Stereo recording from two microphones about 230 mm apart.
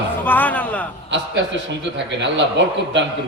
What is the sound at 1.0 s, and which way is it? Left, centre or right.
A man's voice, right.